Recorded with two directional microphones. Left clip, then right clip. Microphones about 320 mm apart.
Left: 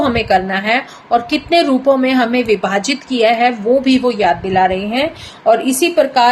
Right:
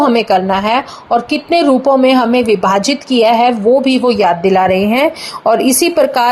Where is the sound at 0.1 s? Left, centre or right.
Centre.